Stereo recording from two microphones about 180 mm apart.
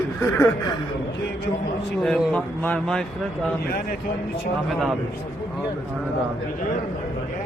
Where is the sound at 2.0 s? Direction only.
Centre (ahead or behind).